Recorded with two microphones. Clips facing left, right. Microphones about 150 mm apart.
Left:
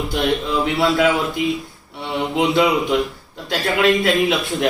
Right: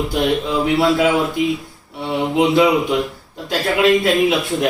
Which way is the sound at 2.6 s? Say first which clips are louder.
Even; centre (ahead or behind).